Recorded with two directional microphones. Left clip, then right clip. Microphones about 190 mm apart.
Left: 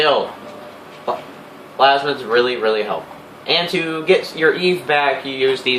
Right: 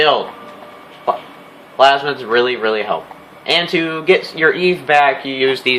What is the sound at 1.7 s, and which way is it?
Speech, 40° right (ahead or behind).